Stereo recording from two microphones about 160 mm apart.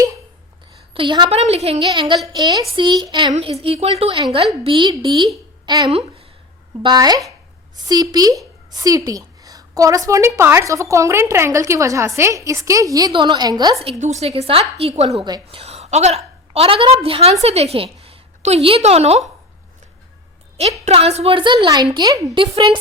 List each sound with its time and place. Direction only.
0.9 s a woman's voice: 30° right (ahead or behind)
1.4 s a woman's voice: 40° right (ahead or behind)
1.9 s a woman's voice: 30° right (ahead or behind)
5.9 s speech: 40° right (ahead or behind)
6.8 s a woman's voice: 25° right (ahead or behind)
14.0 s a woman's voice: 45° right (ahead or behind)
20.8 s a woman's voice: 40° right (ahead or behind)